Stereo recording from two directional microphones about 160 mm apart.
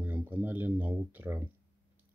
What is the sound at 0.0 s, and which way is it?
Speech, 10° right (ahead or behind).